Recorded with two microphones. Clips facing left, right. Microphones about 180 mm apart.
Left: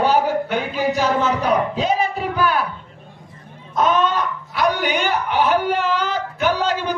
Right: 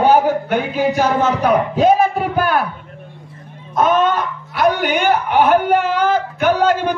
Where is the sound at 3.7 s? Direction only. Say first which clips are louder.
Right 3 dB; 55° right (ahead or behind).